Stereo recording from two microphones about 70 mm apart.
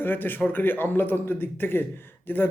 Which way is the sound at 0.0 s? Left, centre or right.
Left.